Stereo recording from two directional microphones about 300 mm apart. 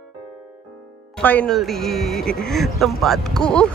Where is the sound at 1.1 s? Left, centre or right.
Centre.